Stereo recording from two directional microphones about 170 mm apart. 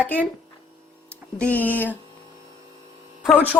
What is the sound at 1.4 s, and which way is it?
Speech, 10° left (ahead or behind).